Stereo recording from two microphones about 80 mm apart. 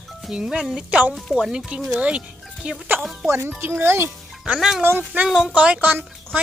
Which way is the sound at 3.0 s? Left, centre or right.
Centre.